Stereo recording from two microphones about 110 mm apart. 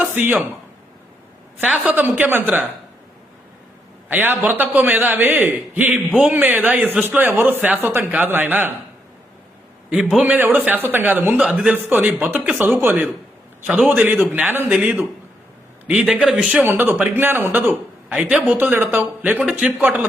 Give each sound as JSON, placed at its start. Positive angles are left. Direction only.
{"t": 0.0, "sound": "speech", "side_deg": -15}
{"t": 1.6, "sound": "a man's voice", "side_deg": -10}
{"t": 4.1, "sound": "a man's voice", "side_deg": -15}
{"t": 9.9, "sound": "a man's voice", "side_deg": -5}
{"t": 10.2, "sound": "a man's voice", "side_deg": -15}